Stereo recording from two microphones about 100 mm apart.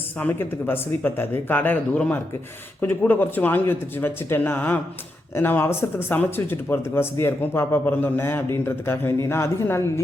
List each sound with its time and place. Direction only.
0.2 s speech: 15° left (ahead or behind)